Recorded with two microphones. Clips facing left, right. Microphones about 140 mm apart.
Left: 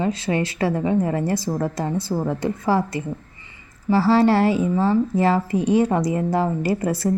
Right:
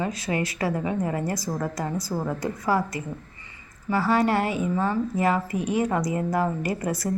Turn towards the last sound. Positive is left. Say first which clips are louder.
# left 6 dB
turn(degrees=30)  # may be behind; listen again after turning